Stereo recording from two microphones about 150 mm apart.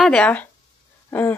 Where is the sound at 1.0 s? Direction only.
15° left (ahead or behind).